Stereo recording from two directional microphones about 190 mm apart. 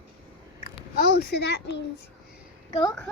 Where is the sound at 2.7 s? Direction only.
25° left (ahead or behind).